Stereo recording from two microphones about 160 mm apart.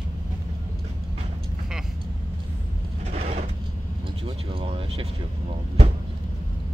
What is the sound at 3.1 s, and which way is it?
Vehicle, 45° right (ahead or behind).